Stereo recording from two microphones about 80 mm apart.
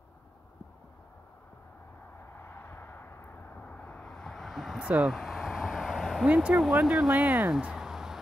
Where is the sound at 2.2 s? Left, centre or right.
Left; by 6.3 s centre.